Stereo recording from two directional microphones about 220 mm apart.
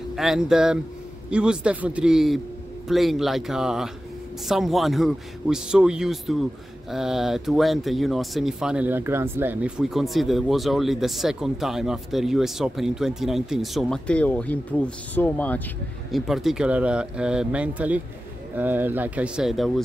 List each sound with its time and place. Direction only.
0.1 s speech: centre (ahead or behind)